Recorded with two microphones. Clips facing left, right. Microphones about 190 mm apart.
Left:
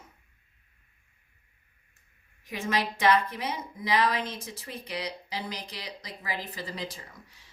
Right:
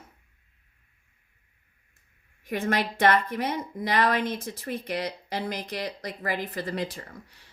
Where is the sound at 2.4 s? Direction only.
55° right (ahead or behind).